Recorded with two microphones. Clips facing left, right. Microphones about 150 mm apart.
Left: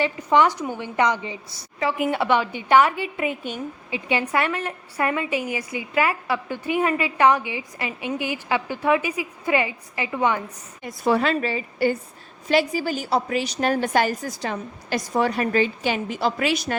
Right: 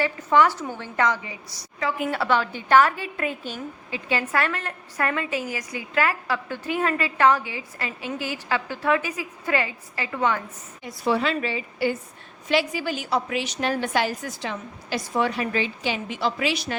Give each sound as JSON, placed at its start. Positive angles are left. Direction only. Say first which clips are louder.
{"t": 0.0, "sound": "a woman's voice", "louder": "left 1 dB", "side_deg": 20}
{"t": 10.8, "sound": "a woman's voice", "louder": "left 3 dB", "side_deg": 50}